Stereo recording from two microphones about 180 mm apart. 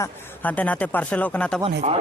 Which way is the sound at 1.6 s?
40° right (ahead or behind).